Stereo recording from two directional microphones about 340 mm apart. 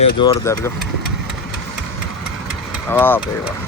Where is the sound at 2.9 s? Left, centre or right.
Centre.